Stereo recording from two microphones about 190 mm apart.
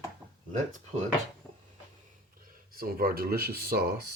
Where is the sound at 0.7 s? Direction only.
40° right (ahead or behind).